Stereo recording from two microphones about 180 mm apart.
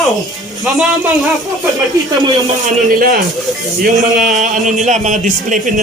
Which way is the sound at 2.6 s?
55° right (ahead or behind).